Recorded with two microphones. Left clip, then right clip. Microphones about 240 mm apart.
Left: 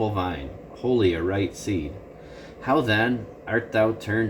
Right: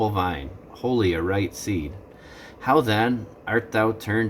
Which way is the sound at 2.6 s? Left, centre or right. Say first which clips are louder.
Right 2 dB; right.